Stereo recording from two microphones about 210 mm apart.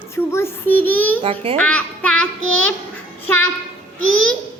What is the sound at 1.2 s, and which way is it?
Speech, 25° right (ahead or behind).